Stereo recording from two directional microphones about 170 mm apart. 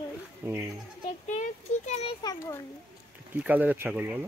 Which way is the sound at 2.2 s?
25° left (ahead or behind).